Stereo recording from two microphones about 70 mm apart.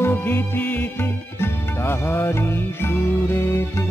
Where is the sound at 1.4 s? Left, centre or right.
Left.